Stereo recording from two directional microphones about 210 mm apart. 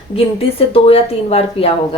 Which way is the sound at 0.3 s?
25° left (ahead or behind).